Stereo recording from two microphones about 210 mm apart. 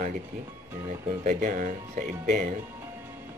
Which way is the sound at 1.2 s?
40° right (ahead or behind).